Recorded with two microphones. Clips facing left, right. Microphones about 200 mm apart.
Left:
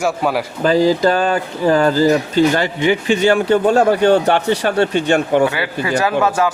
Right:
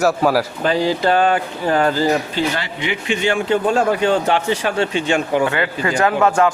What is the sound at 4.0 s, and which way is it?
Speech, 60° left (ahead or behind).